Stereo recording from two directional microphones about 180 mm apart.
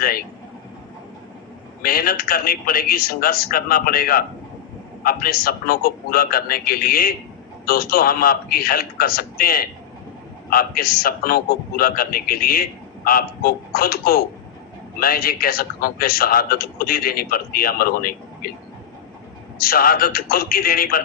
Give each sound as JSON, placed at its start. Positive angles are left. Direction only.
{"t": 1.8, "sound": "a man's voice", "side_deg": 55}
{"t": 19.5, "sound": "a man's voice", "side_deg": 55}